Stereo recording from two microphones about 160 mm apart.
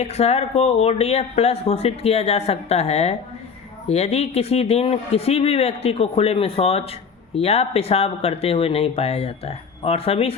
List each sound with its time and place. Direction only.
0.0 s speech: 40° left (ahead or behind)